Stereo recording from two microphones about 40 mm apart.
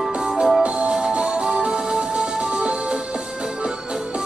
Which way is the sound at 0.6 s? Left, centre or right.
Right.